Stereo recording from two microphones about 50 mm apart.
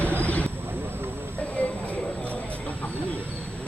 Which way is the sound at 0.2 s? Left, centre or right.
Left.